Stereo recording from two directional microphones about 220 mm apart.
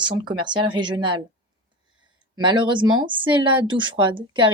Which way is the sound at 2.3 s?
20° right (ahead or behind).